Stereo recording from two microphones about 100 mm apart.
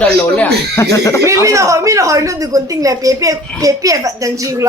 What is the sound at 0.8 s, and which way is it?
Speech, 30° left (ahead or behind).